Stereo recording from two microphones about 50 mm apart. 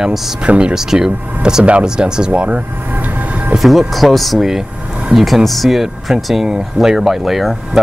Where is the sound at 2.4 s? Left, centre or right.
Right.